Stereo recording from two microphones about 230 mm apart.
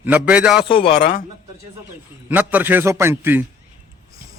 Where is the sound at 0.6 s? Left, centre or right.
Left.